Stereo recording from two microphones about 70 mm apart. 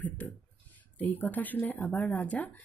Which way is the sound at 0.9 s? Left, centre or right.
Left.